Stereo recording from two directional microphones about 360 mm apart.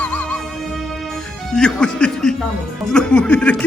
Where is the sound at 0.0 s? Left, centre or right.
Centre.